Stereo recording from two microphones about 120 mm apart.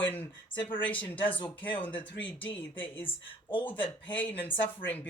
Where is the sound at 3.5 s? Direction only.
45° left (ahead or behind).